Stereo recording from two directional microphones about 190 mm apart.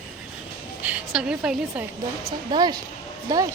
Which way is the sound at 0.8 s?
5° right (ahead or behind).